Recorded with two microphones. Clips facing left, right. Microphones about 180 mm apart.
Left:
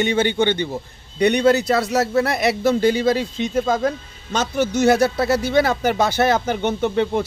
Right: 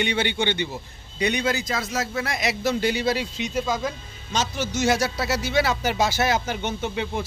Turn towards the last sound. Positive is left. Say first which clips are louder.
# left 8 dB
turn(degrees=55)  # may be behind; listen again after turning